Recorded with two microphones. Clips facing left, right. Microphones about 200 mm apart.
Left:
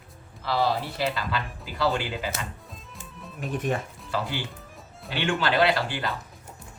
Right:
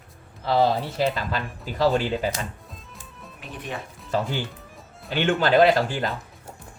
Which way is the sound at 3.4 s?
45° left (ahead or behind).